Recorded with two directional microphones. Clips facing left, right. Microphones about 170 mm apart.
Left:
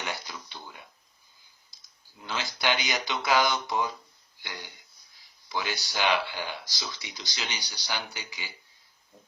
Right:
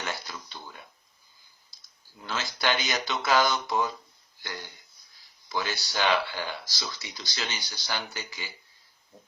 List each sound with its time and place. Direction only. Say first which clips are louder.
0.0 s a sound: right 1 dB; 15° left (ahead or behind)
2.2 s speech: right 1 dB; 15° left (ahead or behind)
5.5 s speech: right 1 dB; 15° left (ahead or behind)